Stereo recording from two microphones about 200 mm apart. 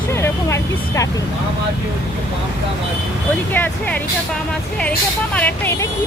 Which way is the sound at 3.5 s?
10° left (ahead or behind).